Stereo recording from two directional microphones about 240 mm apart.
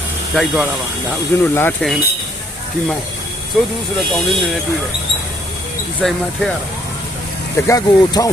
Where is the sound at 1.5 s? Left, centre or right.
Centre.